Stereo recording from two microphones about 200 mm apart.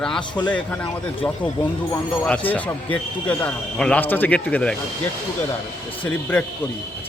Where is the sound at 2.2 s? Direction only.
10° left (ahead or behind).